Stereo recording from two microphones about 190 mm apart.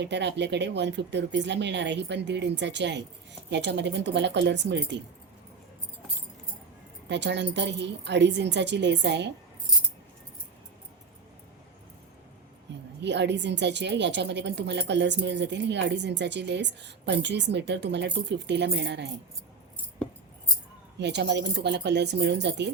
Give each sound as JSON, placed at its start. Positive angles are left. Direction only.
{"t": 0.0, "sound": "a woman's voice", "side_deg": -65}
{"t": 7.1, "sound": "a woman's voice", "side_deg": -65}
{"t": 13.0, "sound": "a woman's voice", "side_deg": -65}
{"t": 21.0, "sound": "a woman's voice", "side_deg": -65}